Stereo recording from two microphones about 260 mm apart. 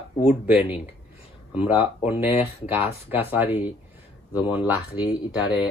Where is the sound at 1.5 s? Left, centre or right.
Centre.